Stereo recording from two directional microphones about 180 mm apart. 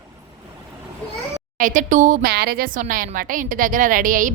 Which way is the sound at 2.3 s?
60° right (ahead or behind).